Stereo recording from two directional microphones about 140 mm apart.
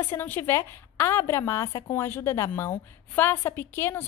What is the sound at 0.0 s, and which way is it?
A woman's voice, 15° left (ahead or behind).